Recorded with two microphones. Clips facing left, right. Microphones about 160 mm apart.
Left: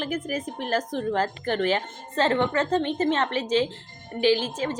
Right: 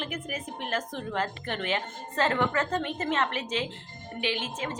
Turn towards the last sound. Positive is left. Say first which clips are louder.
# left 9 dB
turn(degrees=30)  # may be behind; listen again after turning